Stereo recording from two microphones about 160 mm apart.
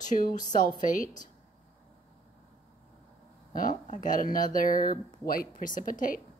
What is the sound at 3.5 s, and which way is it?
Speech, 55° left (ahead or behind).